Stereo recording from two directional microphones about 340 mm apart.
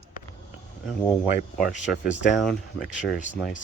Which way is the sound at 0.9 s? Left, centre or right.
Centre.